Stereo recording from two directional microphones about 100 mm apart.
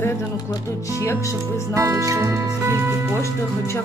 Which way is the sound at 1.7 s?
35° right (ahead or behind).